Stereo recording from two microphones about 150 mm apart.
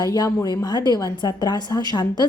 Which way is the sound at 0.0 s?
25° left (ahead or behind).